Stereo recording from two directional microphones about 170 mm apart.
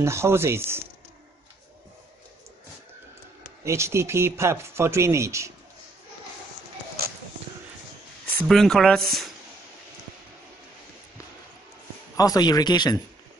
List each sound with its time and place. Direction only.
0.0 s speech: 15° right (ahead or behind)
3.6 s speech: 15° right (ahead or behind)
8.3 s speech: 5° left (ahead or behind)
12.2 s speech: 20° left (ahead or behind)